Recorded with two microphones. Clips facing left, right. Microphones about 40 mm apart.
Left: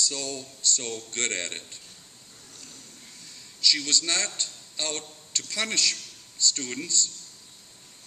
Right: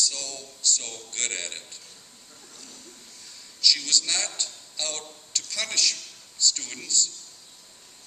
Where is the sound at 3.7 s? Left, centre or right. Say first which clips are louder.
Even; left.